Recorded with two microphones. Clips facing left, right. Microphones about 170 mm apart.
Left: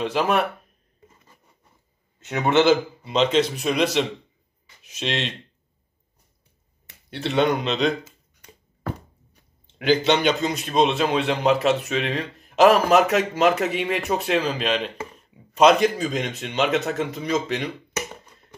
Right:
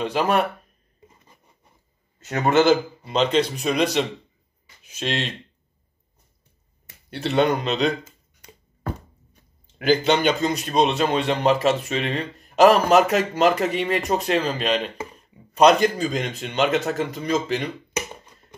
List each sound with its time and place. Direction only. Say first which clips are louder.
0.0 s a man's voice: right 1 dB; centre (ahead or behind)
1.0 s a sound: right 1 dB; 15° right (ahead or behind)
2.2 s a man's voice: right 1 dB; centre (ahead or behind)
7.1 s a man's voice: right 1 dB; centre (ahead or behind)
9.8 s a man's voice: even; 5° right (ahead or behind)